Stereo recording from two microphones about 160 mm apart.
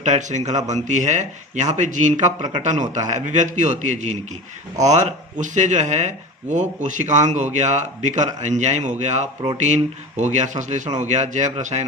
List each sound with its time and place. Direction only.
0.0 s speech: 50° right (ahead or behind)